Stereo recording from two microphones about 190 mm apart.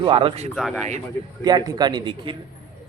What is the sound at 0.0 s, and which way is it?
Speech, 30° right (ahead or behind).